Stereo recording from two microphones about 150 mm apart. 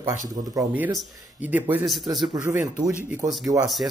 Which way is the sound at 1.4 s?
10° right (ahead or behind).